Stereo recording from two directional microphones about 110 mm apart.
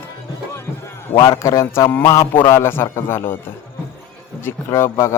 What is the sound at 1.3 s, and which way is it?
Speech, 25° left (ahead or behind).